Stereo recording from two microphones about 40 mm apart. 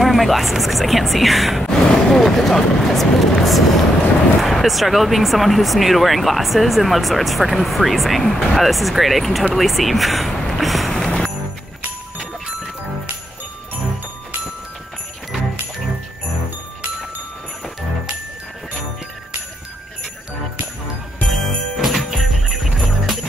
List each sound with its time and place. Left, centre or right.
0.0 s speech: centre
1.6 s speech: centre
10.6 s vehicle: centre
10.9 s music: centre
21.3 s jingle bell: centre